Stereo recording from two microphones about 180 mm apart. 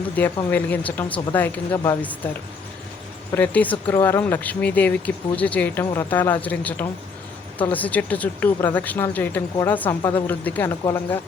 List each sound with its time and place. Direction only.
0.5 s speech: 10° left (ahead or behind)
3.3 s speech: 10° left (ahead or behind)
10.0 s a woman's voice: 25° left (ahead or behind)
10.2 s speech: 10° left (ahead or behind)